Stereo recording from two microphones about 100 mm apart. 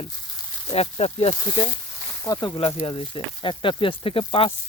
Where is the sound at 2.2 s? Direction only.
40° left (ahead or behind).